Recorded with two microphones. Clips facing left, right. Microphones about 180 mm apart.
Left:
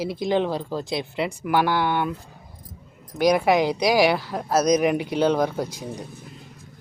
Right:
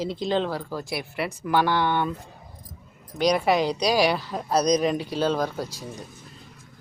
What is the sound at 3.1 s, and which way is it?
Speech, 10° left (ahead or behind).